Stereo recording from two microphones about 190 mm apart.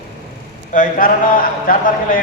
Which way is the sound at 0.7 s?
45° left (ahead or behind).